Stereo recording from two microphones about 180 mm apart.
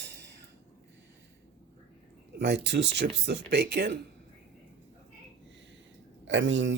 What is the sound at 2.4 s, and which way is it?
Speech, 70° right (ahead or behind).